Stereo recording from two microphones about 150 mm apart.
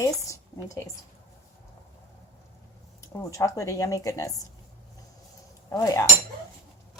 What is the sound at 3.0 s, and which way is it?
Speech, 20° left (ahead or behind).